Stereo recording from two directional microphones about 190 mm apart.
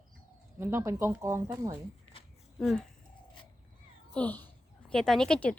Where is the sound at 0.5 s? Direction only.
15° right (ahead or behind).